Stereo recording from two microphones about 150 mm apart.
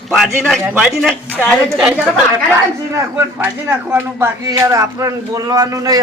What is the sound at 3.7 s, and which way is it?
Speech, 10° right (ahead or behind).